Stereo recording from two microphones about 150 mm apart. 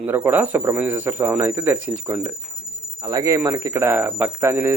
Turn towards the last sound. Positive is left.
turn(degrees=-15)  # may be behind; listen again after turning